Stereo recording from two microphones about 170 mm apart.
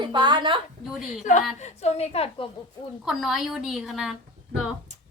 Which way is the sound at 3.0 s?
Centre (ahead or behind).